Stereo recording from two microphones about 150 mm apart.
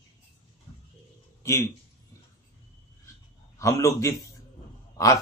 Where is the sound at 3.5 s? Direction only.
20° left (ahead or behind).